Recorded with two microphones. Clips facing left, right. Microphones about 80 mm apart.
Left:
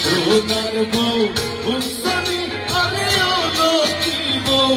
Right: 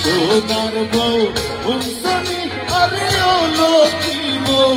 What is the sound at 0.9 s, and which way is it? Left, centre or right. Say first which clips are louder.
Music: right 3 dB; right.